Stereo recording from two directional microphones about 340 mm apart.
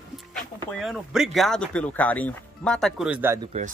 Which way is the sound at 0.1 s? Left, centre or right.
Centre.